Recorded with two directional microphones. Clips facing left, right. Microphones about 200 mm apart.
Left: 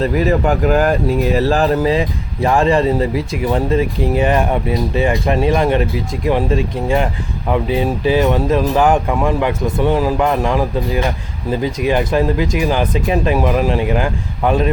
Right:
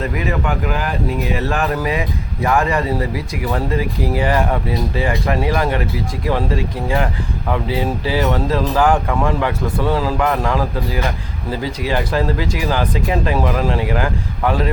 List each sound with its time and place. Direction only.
0.0 s speech: 35° left (ahead or behind); by 14.7 s 20° left (ahead or behind)